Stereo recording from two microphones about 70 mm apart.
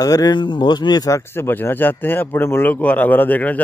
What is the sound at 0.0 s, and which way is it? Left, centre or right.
Speech, left.